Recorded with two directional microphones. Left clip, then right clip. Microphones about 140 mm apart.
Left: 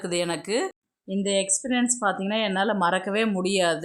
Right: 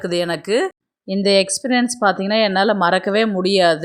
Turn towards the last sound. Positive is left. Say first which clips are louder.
# right 8 dB
turn(degrees=-30)  # may be behind; listen again after turning